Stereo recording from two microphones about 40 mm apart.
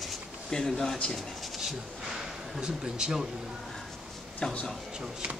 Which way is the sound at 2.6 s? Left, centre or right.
Centre.